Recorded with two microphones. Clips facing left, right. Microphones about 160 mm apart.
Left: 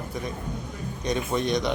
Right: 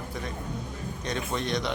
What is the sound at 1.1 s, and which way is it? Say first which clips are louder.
Speech: left 5 dB; 15° left (ahead or behind).